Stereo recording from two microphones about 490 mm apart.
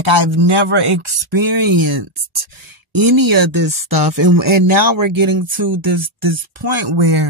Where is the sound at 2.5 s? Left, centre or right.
Right.